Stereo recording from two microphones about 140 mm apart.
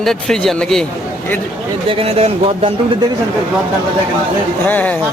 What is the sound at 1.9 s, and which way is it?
Speech, 45° right (ahead or behind).